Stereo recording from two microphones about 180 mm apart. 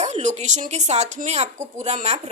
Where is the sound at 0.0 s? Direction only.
40° right (ahead or behind).